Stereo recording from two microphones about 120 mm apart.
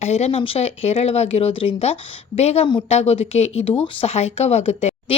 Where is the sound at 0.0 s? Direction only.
65° left (ahead or behind).